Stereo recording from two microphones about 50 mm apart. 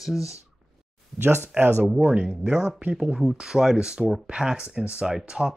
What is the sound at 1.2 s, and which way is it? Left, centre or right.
Speech, right.